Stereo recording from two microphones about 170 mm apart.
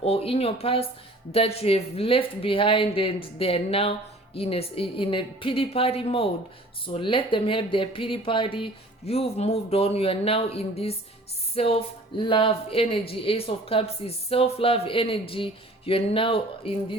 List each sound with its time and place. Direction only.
0.0 s speech: 35° left (ahead or behind)